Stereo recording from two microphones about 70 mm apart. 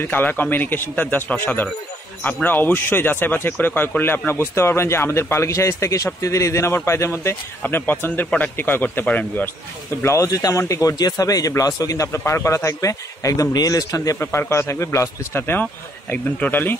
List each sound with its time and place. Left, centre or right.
0.0 s speech: left
7.6 s speech: left
10.0 s speech: left
11.0 s speech: left
12.1 s speech: left
14.2 s speech: left
15.6 s speech: left